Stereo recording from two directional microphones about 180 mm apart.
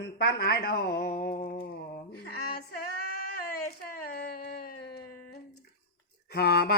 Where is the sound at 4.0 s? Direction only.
60° left (ahead or behind).